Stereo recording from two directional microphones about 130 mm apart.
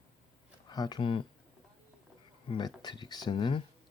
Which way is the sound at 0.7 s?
30° left (ahead or behind).